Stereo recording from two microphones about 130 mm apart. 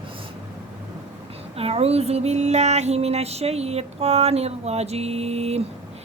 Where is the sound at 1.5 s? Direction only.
50° right (ahead or behind).